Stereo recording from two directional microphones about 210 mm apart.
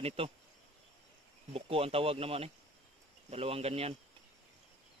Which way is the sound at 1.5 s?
25° right (ahead or behind).